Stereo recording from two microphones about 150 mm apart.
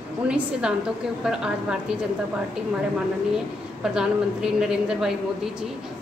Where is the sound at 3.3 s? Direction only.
5° right (ahead or behind).